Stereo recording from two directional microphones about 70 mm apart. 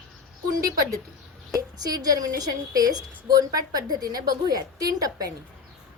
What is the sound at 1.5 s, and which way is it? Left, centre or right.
A woman's voice, right.